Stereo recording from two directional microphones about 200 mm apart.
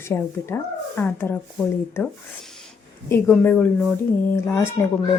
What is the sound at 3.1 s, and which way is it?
Speech, 10° left (ahead or behind).